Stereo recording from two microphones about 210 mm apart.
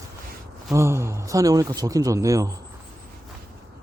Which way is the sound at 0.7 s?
15° right (ahead or behind).